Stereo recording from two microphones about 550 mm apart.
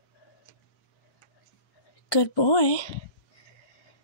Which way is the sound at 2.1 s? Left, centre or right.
Left.